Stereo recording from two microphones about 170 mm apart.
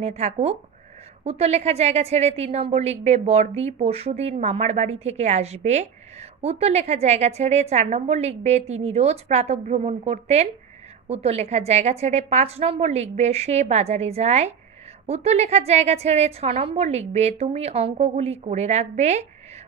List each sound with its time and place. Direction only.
0.0 s a woman's voice: 40° right (ahead or behind)